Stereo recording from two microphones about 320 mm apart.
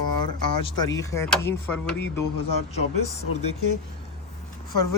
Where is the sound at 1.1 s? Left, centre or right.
Centre.